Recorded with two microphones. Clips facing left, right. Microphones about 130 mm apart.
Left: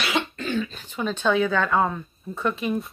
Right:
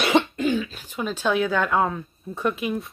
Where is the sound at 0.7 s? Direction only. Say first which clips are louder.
Left 1 dB; 10° right (ahead or behind).